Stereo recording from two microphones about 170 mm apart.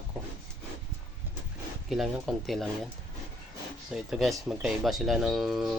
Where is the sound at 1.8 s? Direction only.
Centre (ahead or behind).